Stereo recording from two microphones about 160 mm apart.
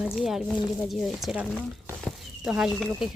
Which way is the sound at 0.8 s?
Centre (ahead or behind).